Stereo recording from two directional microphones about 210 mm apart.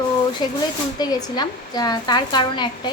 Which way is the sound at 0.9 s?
20° left (ahead or behind).